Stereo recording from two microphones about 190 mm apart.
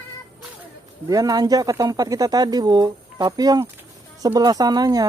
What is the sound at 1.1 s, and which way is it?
Speech, 20° right (ahead or behind).